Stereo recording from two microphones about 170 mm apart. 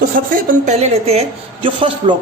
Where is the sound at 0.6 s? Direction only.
40° right (ahead or behind).